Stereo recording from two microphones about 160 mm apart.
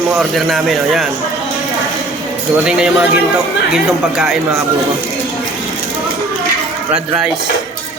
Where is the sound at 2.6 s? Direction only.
5° right (ahead or behind).